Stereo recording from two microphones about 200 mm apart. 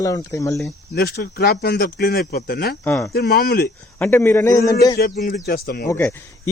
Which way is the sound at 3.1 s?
50° left (ahead or behind).